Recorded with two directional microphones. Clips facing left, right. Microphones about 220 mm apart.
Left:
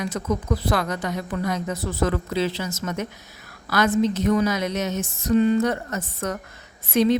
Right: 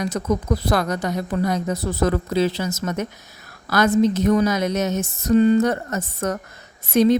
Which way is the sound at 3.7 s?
40° right (ahead or behind).